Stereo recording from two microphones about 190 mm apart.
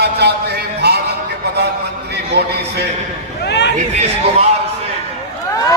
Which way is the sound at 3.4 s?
60° left (ahead or behind).